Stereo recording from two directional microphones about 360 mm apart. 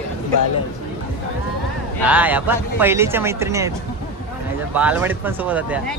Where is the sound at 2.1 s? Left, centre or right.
Centre.